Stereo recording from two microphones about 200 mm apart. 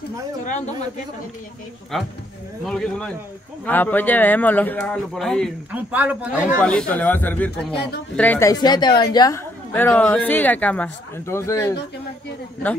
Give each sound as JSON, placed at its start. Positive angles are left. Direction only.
{"t": 1.9, "sound": "a man's voice", "side_deg": 0}
{"t": 6.6, "sound": "a woman's voice", "side_deg": 5}
{"t": 9.7, "sound": "speech", "side_deg": 10}